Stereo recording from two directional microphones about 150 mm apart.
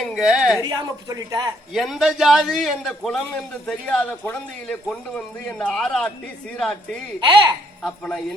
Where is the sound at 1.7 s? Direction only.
Centre (ahead or behind).